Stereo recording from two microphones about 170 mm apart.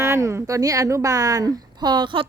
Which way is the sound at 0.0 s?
15° right (ahead or behind).